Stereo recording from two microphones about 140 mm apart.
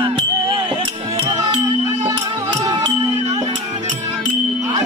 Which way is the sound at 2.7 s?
30° right (ahead or behind).